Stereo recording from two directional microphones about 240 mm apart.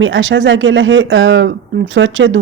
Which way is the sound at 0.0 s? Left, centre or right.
Right.